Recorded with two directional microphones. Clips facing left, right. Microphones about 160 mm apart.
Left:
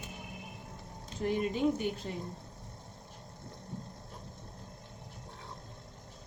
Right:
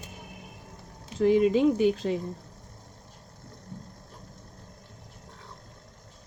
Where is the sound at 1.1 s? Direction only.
90° right.